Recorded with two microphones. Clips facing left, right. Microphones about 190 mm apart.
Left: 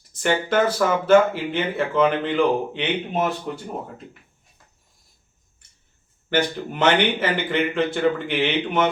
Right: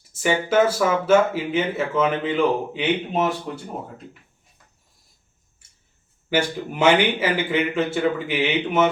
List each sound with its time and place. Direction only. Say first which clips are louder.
0.1 s speech: right 1 dB; 5° right (ahead or behind)
6.3 s speech: even; 10° right (ahead or behind)